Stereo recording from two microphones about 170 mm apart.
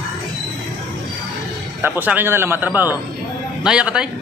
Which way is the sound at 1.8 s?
10° right (ahead or behind).